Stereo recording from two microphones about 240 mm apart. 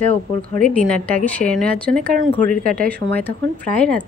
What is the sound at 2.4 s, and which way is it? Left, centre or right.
Speech, right.